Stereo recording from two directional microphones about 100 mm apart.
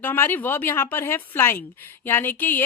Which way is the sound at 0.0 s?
20° left (ahead or behind).